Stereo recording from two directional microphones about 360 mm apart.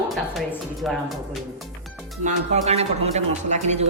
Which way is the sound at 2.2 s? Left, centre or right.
Centre.